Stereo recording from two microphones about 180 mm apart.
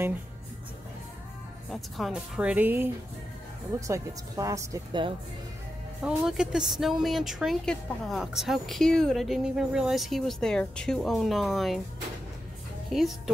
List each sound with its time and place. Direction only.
1.7 s a woman's voice: centre (ahead or behind); by 5.0 s 15° right (ahead or behind)
6.0 s a woman's voice: 5° right (ahead or behind)
12.9 s a woman's voice: centre (ahead or behind)